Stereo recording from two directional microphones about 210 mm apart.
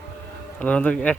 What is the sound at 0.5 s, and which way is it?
Speech, 5° left (ahead or behind).